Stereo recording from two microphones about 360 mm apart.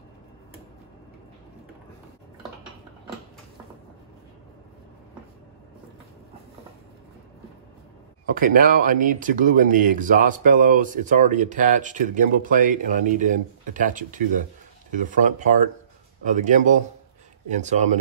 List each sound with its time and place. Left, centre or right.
8.4 s speech: right